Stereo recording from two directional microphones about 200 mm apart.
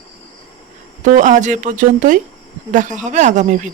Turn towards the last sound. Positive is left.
turn(degrees=-40)  # may be behind; listen again after turning